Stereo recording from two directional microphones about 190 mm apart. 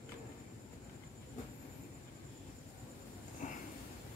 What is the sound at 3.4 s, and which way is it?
Sniff, 40° left (ahead or behind).